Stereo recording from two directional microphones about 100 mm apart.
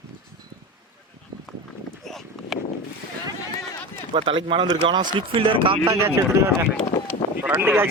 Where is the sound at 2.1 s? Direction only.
5° left (ahead or behind).